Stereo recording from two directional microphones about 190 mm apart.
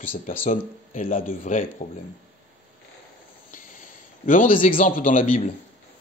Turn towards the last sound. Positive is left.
turn(degrees=45)  # may be behind; listen again after turning